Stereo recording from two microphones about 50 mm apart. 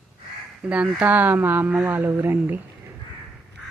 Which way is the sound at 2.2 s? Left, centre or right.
Right.